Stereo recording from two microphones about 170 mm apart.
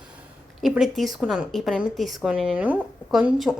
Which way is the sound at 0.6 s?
Centre (ahead or behind).